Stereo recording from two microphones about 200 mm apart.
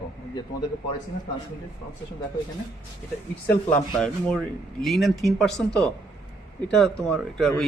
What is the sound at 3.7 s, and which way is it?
Speech, 5° left (ahead or behind).